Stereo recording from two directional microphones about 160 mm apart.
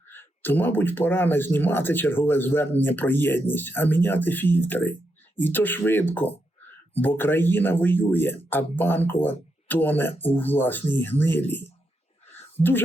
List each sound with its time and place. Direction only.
0.1 s speech: 15° left (ahead or behind)
12.6 s speech: 45° left (ahead or behind)